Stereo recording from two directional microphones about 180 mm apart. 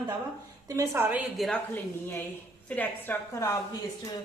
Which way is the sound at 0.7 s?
15° right (ahead or behind).